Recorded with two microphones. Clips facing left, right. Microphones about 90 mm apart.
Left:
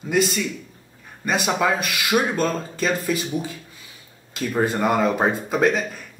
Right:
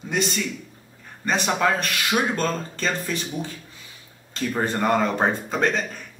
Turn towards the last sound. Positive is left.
turn(degrees=5)  # may be behind; listen again after turning